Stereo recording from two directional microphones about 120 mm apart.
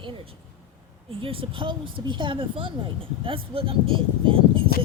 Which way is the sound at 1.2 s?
50° right (ahead or behind).